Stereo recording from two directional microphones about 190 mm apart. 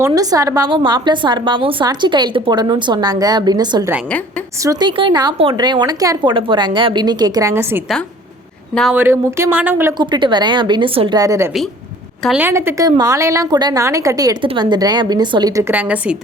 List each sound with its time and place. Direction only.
0.0 s a woman's voice: 20° right (ahead or behind)
8.7 s speech: centre (ahead or behind)
9.0 s a woman's voice: 15° right (ahead or behind)
10.0 s a woman's voice: 25° right (ahead or behind); by 16.1 s 10° right (ahead or behind)